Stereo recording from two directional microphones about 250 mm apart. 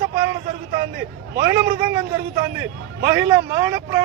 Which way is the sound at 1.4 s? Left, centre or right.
Right.